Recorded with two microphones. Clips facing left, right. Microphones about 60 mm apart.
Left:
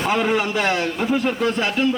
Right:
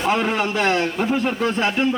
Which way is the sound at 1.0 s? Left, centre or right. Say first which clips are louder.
Even; centre.